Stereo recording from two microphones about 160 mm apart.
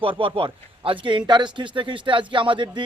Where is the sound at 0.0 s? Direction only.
35° right (ahead or behind).